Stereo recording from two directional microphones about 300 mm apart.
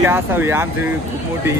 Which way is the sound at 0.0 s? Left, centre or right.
Centre.